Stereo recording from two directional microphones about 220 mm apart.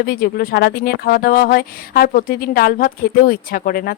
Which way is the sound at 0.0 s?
45° left (ahead or behind).